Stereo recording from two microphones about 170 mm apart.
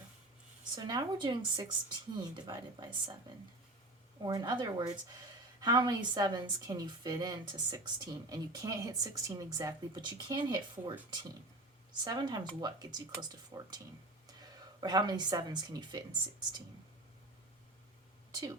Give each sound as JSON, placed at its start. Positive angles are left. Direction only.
{"t": 0.8, "sound": "a woman's voice", "side_deg": -25}
{"t": 4.2, "sound": "a woman's voice", "side_deg": -25}
{"t": 12.0, "sound": "a woman's voice", "side_deg": -25}
{"t": 18.3, "sound": "speech", "side_deg": -20}